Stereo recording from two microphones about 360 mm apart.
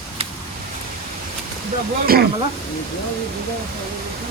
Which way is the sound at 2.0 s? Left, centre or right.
Right.